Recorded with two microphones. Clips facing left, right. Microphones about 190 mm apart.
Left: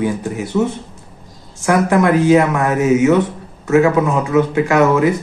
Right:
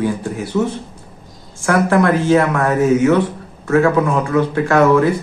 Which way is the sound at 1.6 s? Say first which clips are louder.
Even; 15° left (ahead or behind).